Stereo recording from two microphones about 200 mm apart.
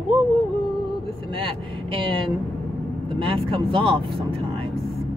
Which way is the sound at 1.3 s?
25° right (ahead or behind).